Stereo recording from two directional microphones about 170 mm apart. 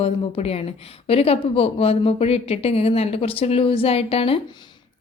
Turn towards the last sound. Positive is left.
turn(degrees=35)  # may be behind; listen again after turning